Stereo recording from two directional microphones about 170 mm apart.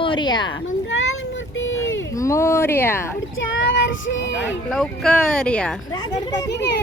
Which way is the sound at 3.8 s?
90° left.